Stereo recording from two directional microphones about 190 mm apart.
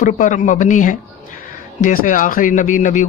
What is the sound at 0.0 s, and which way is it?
A man's voice, 40° left (ahead or behind).